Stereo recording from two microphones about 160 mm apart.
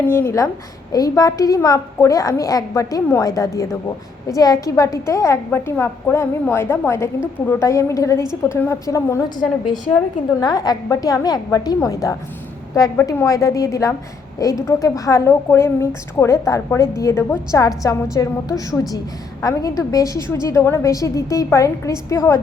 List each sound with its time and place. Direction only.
0.0 s a woman's voice: 15° left (ahead or behind)
10.4 s a woman's voice: 25° left (ahead or behind)